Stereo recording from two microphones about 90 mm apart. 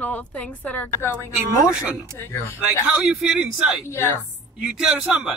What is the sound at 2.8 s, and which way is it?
Speech, 10° right (ahead or behind).